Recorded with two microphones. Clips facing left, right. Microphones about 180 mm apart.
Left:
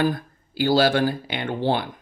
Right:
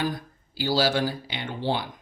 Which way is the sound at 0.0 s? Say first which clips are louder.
Left 6 dB; 55° left (ahead or behind).